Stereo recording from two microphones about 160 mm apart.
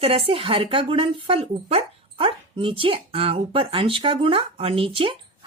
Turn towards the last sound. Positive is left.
turn(degrees=-35)  # may be behind; listen again after turning